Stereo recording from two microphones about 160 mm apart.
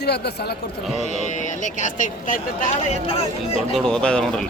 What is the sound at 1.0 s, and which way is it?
Speech, 50° left (ahead or behind).